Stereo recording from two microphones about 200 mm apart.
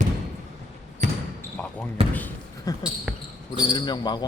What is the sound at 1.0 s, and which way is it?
Basketball bounce, 35° right (ahead or behind).